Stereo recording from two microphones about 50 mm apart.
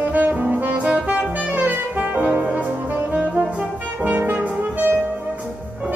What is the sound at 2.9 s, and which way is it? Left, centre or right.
Brass instrument, right.